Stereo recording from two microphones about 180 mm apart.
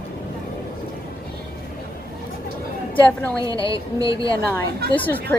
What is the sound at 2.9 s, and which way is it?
Speech, 10° left (ahead or behind).